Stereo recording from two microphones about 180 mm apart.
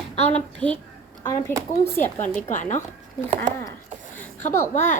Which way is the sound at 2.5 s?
45° left (ahead or behind).